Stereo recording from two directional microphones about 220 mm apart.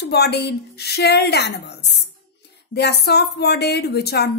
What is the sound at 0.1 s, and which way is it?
Speech, 50° left (ahead or behind).